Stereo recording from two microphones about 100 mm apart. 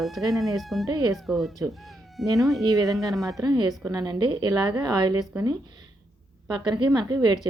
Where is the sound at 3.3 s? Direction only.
45° right (ahead or behind).